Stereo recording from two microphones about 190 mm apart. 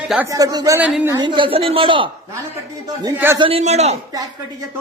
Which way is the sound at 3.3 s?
30° right (ahead or behind).